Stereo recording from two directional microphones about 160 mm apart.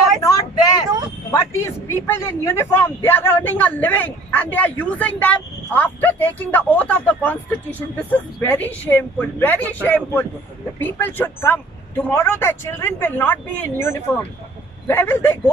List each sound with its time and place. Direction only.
0.2 s vehicle: 20° left (ahead or behind)
1.3 s a man's voice: 15° left (ahead or behind)